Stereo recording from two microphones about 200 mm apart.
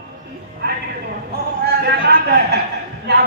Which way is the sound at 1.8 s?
55° right (ahead or behind).